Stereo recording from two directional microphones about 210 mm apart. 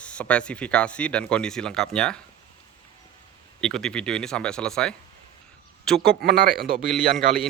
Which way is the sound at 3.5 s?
5° left (ahead or behind).